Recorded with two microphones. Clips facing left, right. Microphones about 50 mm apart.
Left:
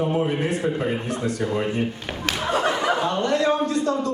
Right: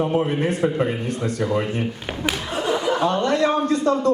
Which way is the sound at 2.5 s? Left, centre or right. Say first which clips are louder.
Left 1 dB; left.